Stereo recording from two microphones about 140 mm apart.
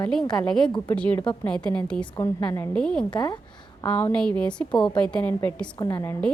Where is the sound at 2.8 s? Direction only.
5° left (ahead or behind).